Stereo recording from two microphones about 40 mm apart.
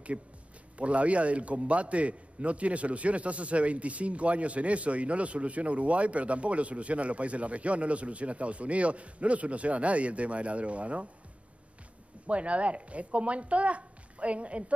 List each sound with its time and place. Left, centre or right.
0.7 s a man's voice: right
12.3 s a man's voice: right